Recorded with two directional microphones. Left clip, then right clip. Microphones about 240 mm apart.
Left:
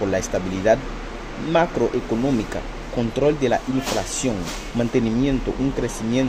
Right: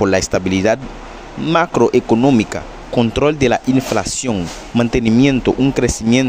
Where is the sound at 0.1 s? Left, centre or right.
Right.